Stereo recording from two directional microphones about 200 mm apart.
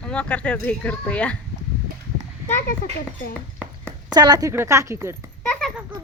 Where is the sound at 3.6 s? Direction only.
10° right (ahead or behind).